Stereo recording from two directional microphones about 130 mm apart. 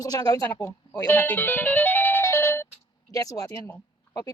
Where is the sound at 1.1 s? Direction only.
15° left (ahead or behind).